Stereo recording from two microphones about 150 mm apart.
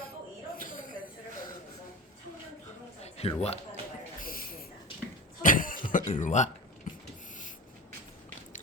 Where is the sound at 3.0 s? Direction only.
45° left (ahead or behind).